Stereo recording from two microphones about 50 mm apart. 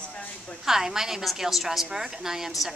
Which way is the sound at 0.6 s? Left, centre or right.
Centre.